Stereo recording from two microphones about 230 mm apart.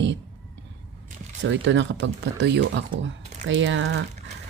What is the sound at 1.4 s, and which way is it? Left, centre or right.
A woman's voice, right.